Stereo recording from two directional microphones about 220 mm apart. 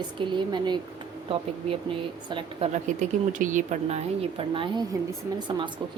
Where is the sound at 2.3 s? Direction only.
20° right (ahead or behind).